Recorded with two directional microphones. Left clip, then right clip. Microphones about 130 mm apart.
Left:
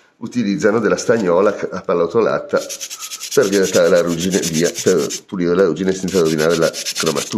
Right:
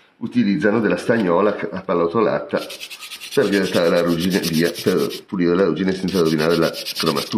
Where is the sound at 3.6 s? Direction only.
30° left (ahead or behind).